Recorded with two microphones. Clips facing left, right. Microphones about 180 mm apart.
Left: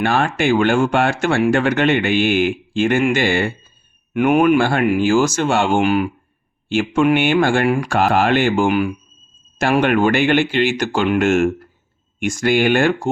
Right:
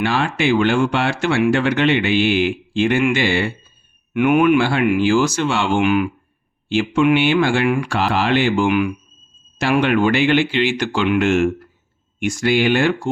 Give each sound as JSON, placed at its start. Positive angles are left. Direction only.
{"t": 0.0, "sound": "speech", "side_deg": 50}